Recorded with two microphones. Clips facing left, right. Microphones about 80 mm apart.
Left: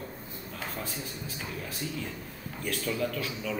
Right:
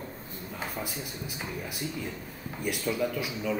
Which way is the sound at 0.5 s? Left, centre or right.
Centre.